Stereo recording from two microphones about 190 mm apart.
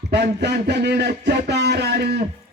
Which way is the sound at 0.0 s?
60° right (ahead or behind).